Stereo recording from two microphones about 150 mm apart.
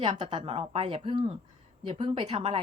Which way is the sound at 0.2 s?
35° right (ahead or behind).